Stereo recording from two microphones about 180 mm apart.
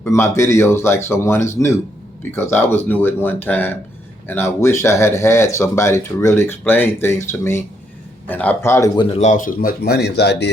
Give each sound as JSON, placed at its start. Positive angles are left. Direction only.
{"t": 0.0, "sound": "speech", "side_deg": 15}
{"t": 9.0, "sound": "a man's voice", "side_deg": 35}